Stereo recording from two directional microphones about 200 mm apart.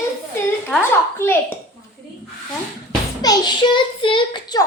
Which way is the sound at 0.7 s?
10° left (ahead or behind).